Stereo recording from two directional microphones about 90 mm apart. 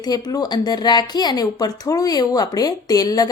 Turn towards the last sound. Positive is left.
turn(degrees=45)  # may be behind; listen again after turning